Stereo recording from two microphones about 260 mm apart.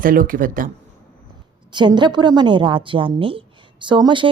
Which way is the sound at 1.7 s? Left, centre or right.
Centre.